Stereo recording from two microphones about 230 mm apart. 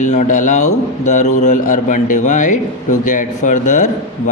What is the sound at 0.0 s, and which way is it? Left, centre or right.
A man's voice, left.